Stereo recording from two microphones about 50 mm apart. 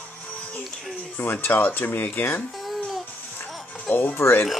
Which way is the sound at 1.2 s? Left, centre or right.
Left.